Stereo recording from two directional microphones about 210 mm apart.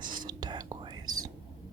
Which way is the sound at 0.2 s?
20° right (ahead or behind).